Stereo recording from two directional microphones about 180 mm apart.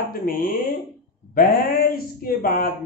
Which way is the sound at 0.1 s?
55° left (ahead or behind).